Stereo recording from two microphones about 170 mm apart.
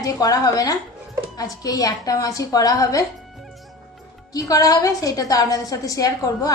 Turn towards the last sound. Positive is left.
turn(degrees=20)  # may be behind; listen again after turning